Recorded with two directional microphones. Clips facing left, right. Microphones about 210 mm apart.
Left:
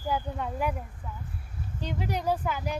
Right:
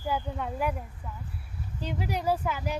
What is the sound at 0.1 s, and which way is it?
Speech, centre (ahead or behind).